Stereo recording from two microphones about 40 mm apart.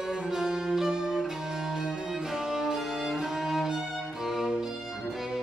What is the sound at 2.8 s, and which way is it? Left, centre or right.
Music, centre.